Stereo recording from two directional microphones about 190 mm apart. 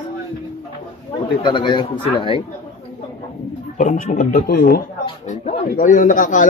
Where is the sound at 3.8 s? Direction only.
40° left (ahead or behind).